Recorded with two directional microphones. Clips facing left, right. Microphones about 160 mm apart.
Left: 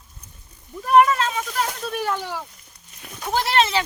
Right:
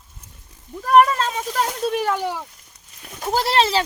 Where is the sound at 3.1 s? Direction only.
40° right (ahead or behind).